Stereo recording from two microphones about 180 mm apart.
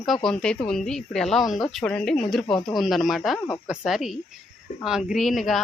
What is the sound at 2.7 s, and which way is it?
Speech, centre (ahead or behind).